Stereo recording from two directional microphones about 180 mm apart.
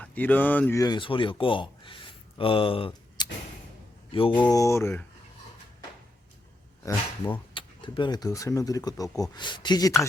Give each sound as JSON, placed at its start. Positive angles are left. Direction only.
{"t": 0.0, "sound": "speech", "side_deg": 10}
{"t": 4.5, "sound": "speech", "side_deg": 15}
{"t": 6.8, "sound": "speech", "side_deg": 10}
{"t": 7.5, "sound": "speech", "side_deg": 25}